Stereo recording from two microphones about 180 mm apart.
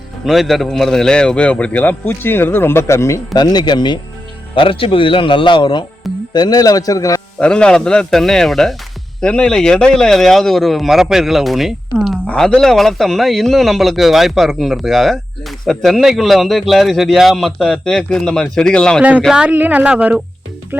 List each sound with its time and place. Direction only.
0.3 s speech: centre (ahead or behind); by 7.2 s 20° left (ahead or behind)
7.3 s a man's voice: 5° left (ahead or behind)